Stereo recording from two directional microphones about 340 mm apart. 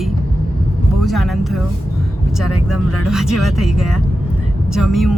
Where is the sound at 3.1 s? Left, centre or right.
Centre.